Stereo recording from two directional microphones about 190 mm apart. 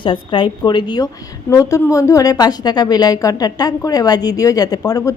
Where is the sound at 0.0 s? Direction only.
25° left (ahead or behind).